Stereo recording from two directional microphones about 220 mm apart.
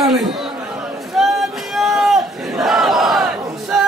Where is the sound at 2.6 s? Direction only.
Centre (ahead or behind).